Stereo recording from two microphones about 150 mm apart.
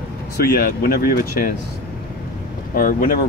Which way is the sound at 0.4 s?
80° left.